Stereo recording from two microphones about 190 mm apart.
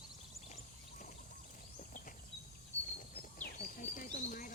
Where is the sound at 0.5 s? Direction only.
40° left (ahead or behind).